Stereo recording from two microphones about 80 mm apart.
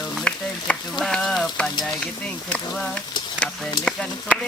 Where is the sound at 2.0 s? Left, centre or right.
Centre.